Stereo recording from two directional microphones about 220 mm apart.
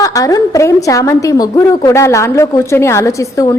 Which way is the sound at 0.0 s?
15° left (ahead or behind).